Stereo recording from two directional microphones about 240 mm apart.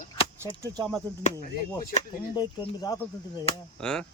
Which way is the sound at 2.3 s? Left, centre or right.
Centre.